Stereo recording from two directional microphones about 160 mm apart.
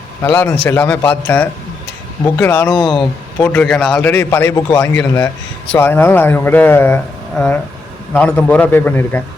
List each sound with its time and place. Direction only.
0.2 s speech: 15° left (ahead or behind)
2.7 s speech: 30° left (ahead or behind)
3.3 s speech: 10° left (ahead or behind)